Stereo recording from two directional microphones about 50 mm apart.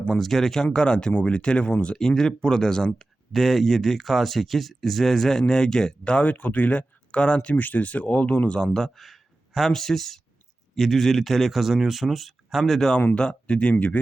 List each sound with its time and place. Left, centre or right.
0.1 s speech: centre; by 2.0 s left
2.0 s speech: centre
6.3 s speech: left
8.5 s speech: centre
13.1 s speech: centre